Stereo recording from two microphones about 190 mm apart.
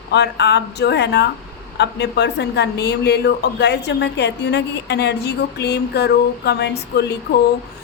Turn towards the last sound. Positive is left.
turn(degrees=60)  # may be behind; listen again after turning